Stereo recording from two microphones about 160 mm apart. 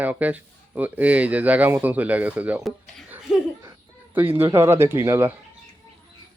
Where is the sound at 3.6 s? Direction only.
15° right (ahead or behind).